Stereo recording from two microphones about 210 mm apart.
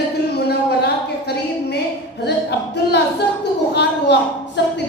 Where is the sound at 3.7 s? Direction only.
55° left (ahead or behind).